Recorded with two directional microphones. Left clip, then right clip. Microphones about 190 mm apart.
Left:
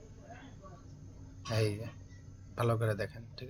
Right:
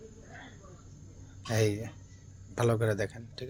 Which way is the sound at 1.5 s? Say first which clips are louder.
Right 5 dB; 20° right (ahead or behind).